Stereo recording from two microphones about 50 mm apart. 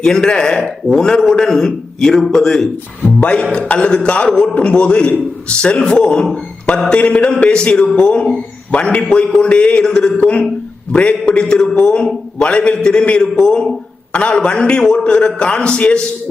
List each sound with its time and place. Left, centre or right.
0.0 s a man's voice: centre
3.7 s a man's voice: left